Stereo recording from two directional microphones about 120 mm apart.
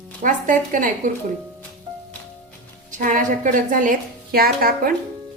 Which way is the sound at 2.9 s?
90° right.